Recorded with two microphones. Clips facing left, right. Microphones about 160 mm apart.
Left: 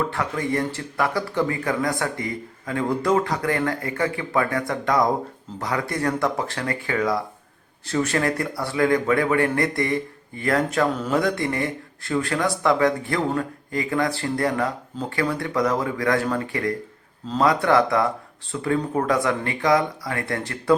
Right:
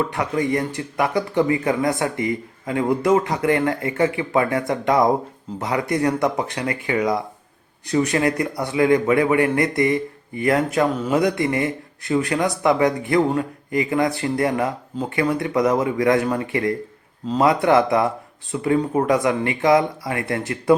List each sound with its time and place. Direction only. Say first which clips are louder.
0.1 s a man's voice: right 3 dB; 20° right (ahead or behind)